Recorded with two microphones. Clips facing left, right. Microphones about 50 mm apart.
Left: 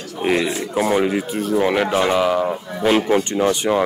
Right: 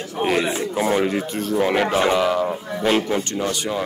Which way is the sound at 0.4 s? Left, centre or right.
Right.